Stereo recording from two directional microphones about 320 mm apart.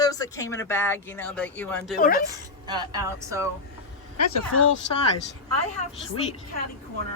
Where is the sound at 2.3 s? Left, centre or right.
Centre.